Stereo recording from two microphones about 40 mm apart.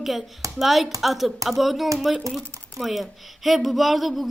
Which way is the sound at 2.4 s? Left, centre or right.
Left.